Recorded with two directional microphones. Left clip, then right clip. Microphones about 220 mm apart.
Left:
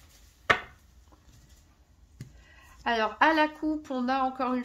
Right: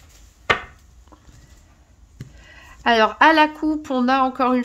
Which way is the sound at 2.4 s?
45° right (ahead or behind).